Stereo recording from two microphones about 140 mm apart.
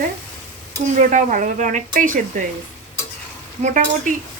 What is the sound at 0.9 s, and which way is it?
Speech, 65° right (ahead or behind).